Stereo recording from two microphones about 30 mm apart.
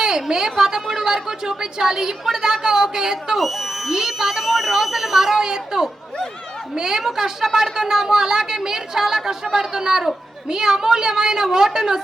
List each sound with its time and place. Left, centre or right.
0.0 s a woman's voice: right
3.3 s speech: centre
5.4 s a woman's voice: right